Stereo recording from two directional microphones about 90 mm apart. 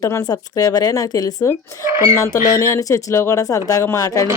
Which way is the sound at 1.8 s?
30° right (ahead or behind).